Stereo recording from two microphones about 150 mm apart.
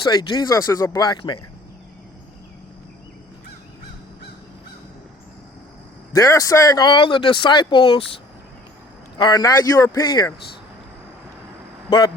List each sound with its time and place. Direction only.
0.0 s speech: 30° left (ahead or behind)
6.1 s speech: 25° left (ahead or behind)
11.9 s speech: 30° left (ahead or behind)